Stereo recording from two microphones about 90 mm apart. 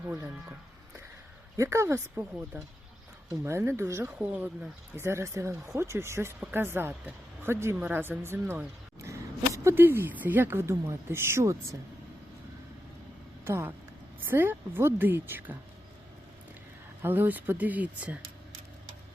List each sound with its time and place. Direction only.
1.5 s speech: 30° right (ahead or behind)
3.4 s speech: 30° right (ahead or behind)
4.2 s speech: 15° right (ahead or behind)
9.0 s a sound: 35° right (ahead or behind)
9.8 s speech: 25° right (ahead or behind)
13.4 s speech: 25° right (ahead or behind)
17.0 s speech: 20° right (ahead or behind)